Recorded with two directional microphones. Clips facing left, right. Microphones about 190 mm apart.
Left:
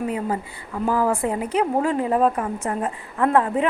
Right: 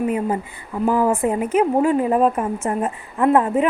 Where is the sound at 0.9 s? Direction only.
20° right (ahead or behind).